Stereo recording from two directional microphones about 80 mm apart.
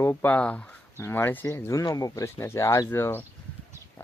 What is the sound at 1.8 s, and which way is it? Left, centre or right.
Speech, left.